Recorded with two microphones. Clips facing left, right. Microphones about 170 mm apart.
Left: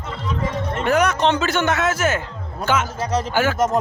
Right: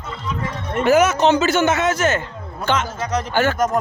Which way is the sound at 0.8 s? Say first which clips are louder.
Right 4 dB; 5° right (ahead or behind).